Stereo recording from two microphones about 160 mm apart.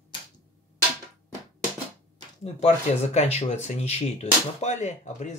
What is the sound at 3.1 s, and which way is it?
Speech, 40° left (ahead or behind).